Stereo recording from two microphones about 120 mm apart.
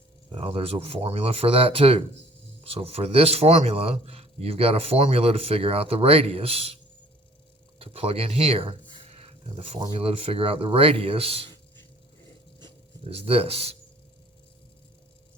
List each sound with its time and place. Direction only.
0.3 s a man's voice: 50° right (ahead or behind)
7.8 s a sound: 50° right (ahead or behind)
9.8 s speech: 50° right (ahead or behind)
13.1 s a man's voice: 55° right (ahead or behind)